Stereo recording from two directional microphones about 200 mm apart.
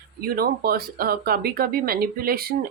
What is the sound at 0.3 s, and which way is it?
Speech, 50° right (ahead or behind).